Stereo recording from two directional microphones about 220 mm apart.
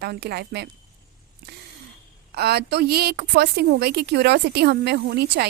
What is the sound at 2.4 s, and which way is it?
Speech, 45° right (ahead or behind).